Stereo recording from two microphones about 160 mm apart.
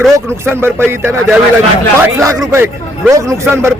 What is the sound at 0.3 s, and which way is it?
A man's voice, 15° right (ahead or behind).